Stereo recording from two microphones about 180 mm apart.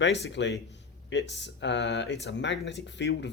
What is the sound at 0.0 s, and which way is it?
Speech, 80° left.